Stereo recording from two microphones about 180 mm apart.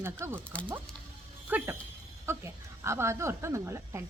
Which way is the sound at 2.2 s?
15° right (ahead or behind).